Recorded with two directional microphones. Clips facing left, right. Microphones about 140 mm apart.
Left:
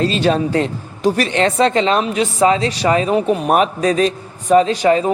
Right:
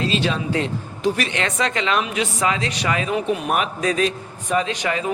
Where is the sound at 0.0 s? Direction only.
40° left (ahead or behind).